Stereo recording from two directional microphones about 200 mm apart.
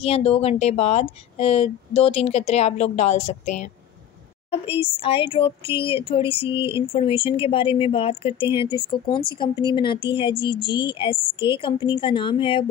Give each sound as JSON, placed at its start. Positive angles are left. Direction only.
{"t": 0.0, "sound": "a woman's voice", "side_deg": 30}